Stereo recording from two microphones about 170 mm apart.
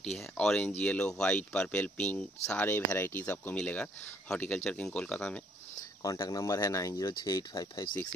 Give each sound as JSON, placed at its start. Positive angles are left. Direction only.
{"t": 0.0, "sound": "speech", "side_deg": 0}
{"t": 5.8, "sound": "speech", "side_deg": 20}